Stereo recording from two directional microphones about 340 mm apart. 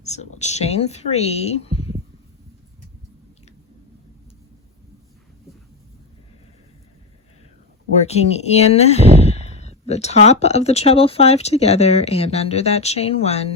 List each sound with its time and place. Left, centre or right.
0.0 s speech: centre
7.9 s speech: centre